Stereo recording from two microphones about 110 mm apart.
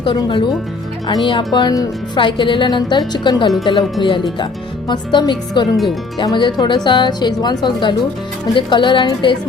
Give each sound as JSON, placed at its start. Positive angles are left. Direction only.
{"t": 0.0, "sound": "a woman's voice", "side_deg": 45}
{"t": 5.7, "sound": "speech", "side_deg": 0}
{"t": 6.2, "sound": "a woman's voice", "side_deg": 40}